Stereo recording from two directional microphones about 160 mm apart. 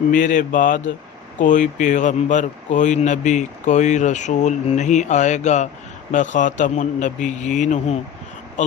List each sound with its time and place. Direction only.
0.1 s speech: 55° left (ahead or behind)